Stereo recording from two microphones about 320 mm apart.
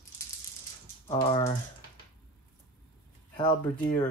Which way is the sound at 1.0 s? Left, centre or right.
Centre.